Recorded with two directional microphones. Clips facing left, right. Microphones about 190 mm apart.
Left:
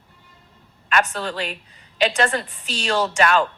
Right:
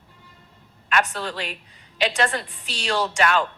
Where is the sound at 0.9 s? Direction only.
45° left (ahead or behind).